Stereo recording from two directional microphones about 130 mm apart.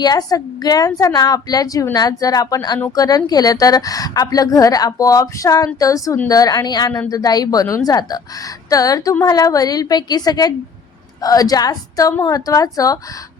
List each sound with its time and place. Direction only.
0.0 s a woman's voice: 30° left (ahead or behind)